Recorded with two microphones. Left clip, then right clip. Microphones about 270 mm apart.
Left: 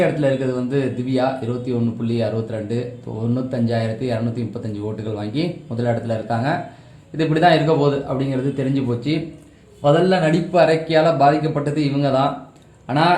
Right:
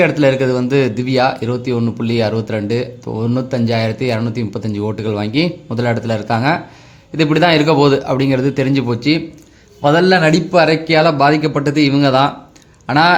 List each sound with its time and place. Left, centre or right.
0.0 s speech: right